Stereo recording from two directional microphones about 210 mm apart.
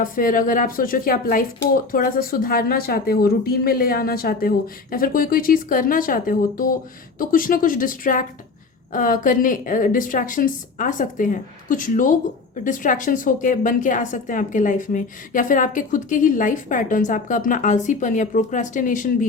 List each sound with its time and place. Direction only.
0.0 s a woman's voice: 40° left (ahead or behind)